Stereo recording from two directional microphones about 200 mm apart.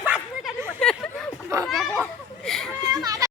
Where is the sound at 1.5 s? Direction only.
15° right (ahead or behind).